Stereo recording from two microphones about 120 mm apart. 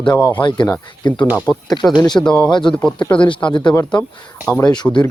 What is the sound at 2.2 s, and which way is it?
Speech, 10° left (ahead or behind).